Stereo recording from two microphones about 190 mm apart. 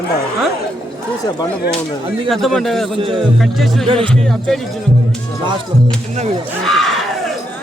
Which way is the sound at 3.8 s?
25° right (ahead or behind).